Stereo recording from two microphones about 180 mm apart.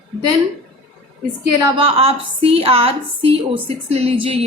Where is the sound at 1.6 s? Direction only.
30° right (ahead or behind).